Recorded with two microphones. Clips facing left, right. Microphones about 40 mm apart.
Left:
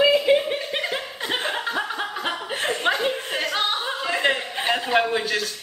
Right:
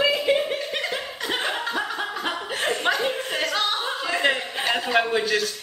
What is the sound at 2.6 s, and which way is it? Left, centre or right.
Chuckle, centre.